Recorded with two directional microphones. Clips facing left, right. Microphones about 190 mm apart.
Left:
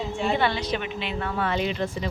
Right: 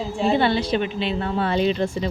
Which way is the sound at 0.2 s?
30° right (ahead or behind).